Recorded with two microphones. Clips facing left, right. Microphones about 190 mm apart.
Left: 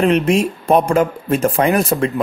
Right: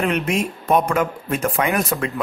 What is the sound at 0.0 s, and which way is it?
Speech, 30° left (ahead or behind).